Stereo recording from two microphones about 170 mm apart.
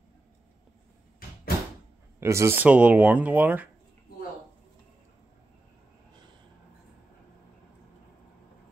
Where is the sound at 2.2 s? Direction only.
15° right (ahead or behind).